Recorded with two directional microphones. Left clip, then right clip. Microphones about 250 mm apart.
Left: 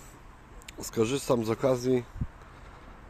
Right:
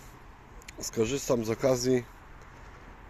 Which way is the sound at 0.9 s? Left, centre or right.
Centre.